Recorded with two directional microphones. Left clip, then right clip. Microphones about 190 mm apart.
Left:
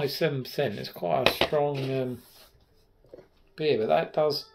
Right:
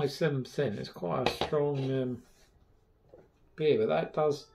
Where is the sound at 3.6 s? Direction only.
45° left (ahead or behind).